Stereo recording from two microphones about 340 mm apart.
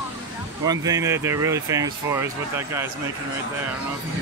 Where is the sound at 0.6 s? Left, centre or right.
Centre.